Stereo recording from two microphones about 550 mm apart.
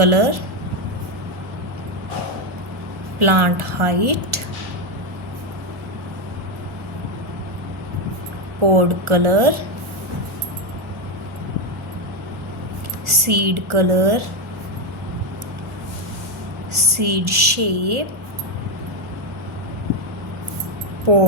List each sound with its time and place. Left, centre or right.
0.0 s speech: right
3.2 s speech: right
8.7 s speech: right
13.1 s a woman's voice: right
16.7 s a woman's voice: right
21.1 s speech: right